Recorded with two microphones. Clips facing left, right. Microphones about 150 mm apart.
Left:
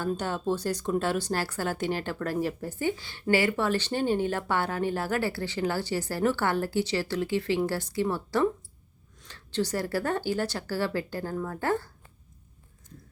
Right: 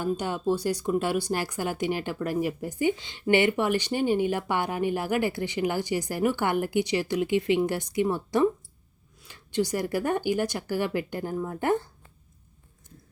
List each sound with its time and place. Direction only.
0.0 s speech: 15° right (ahead or behind)